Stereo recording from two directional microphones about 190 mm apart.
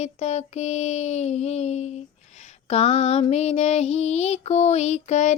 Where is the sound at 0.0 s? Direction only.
35° left (ahead or behind).